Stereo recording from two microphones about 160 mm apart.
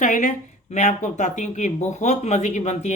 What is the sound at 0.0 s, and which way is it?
Speech, 50° left (ahead or behind).